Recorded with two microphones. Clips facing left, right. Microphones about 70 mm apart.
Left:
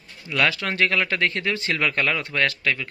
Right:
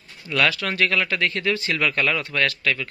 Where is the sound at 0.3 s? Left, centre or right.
Left.